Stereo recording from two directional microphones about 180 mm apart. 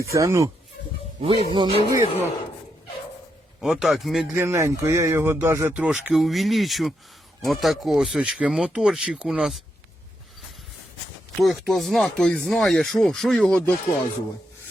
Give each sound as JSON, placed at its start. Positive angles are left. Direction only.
{"t": 0.0, "sound": "speech", "side_deg": -15}
{"t": 1.2, "sound": "speech", "side_deg": -30}
{"t": 3.6, "sound": "speech", "side_deg": -5}
{"t": 4.4, "sound": "speech", "side_deg": -15}
{"t": 11.3, "sound": "speech", "side_deg": 0}